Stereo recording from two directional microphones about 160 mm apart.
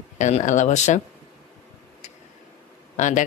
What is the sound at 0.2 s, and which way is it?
Speech, 50° left (ahead or behind).